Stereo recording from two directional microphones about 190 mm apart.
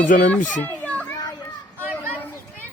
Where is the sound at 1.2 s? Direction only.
20° left (ahead or behind).